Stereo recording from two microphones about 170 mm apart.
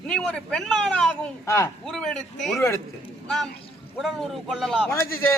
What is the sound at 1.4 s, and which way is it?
Speech, 15° left (ahead or behind).